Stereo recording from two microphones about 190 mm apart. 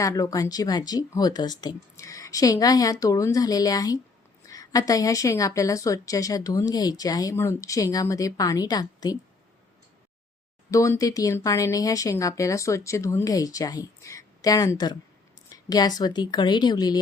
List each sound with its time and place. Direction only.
0.0 s a woman's voice: 20° left (ahead or behind)
10.7 s a woman's voice: 15° left (ahead or behind)